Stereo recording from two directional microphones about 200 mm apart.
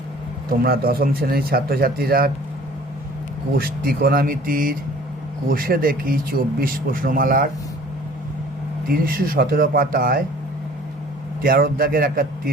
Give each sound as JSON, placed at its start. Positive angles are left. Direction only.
{"t": 0.6, "sound": "speech", "side_deg": -50}
{"t": 3.6, "sound": "speech", "side_deg": -50}
{"t": 8.9, "sound": "speech", "side_deg": -45}
{"t": 11.4, "sound": "speech", "side_deg": -50}